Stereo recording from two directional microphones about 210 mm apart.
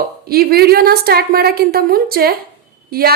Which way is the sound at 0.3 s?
45° right (ahead or behind).